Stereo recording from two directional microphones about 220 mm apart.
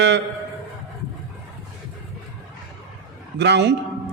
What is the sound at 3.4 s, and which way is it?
Speech, 50° right (ahead or behind).